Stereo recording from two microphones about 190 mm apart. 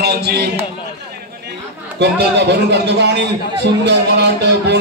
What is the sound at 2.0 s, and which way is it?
A man's voice, 60° right (ahead or behind).